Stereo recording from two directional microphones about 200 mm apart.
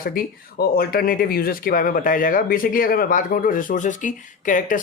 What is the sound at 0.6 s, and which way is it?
Speech, 50° left (ahead or behind).